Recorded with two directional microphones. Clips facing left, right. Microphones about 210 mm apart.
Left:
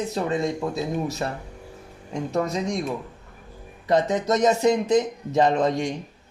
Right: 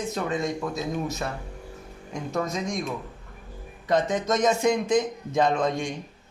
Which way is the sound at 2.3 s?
35° left (ahead or behind).